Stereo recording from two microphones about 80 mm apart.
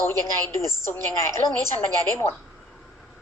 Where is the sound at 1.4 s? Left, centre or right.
Left.